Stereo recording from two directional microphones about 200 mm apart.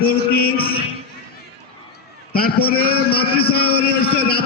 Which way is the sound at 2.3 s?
50° left (ahead or behind).